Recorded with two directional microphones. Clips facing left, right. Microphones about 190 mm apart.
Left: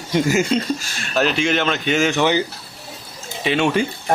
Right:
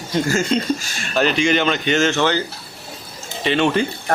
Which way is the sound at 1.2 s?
Centre (ahead or behind).